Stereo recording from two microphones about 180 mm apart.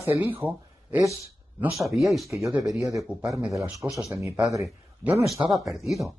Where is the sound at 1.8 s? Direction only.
15° right (ahead or behind).